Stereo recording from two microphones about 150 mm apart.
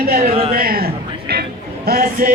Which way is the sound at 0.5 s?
75° right (ahead or behind).